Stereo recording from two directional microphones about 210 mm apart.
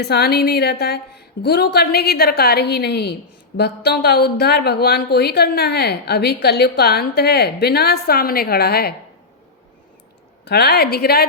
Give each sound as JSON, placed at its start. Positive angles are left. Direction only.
{"t": 0.0, "sound": "a woman's voice", "side_deg": 50}
{"t": 10.4, "sound": "a woman's voice", "side_deg": 50}